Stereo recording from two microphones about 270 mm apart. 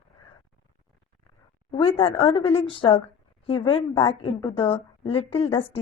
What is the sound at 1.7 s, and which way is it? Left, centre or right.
Speech, centre.